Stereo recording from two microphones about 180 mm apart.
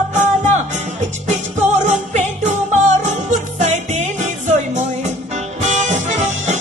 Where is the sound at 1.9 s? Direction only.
40° right (ahead or behind).